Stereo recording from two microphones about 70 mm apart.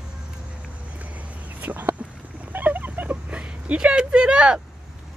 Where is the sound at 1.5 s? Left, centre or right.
Right.